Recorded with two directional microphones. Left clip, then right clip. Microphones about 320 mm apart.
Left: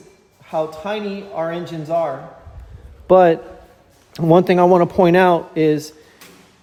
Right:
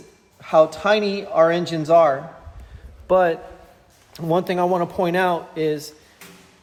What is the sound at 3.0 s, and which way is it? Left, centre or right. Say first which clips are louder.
Speech: left 6 dB; left.